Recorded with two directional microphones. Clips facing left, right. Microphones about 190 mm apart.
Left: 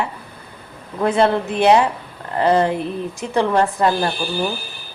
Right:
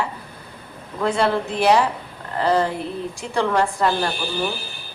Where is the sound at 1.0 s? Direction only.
20° left (ahead or behind).